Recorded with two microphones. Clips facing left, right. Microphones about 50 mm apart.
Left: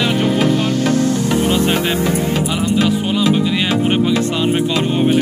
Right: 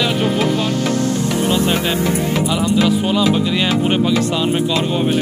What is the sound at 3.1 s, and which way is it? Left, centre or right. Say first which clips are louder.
Speech: even; centre.